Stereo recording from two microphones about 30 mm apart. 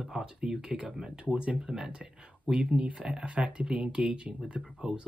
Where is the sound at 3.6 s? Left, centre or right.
Right.